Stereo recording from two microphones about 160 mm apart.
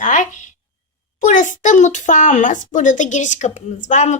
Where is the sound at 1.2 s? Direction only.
50° left (ahead or behind).